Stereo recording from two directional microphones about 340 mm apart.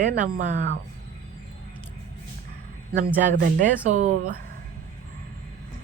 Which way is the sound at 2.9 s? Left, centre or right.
Right.